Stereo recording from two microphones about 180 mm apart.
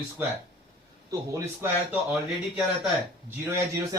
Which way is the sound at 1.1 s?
15° right (ahead or behind).